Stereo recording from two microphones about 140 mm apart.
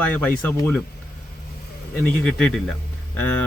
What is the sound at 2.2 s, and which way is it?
Speech, 5° left (ahead or behind).